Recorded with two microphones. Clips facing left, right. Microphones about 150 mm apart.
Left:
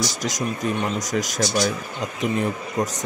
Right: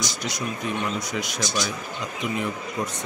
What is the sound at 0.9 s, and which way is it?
Speech, 40° left (ahead or behind).